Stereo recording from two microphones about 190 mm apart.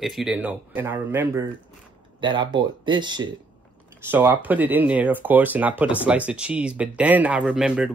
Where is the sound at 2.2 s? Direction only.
25° right (ahead or behind).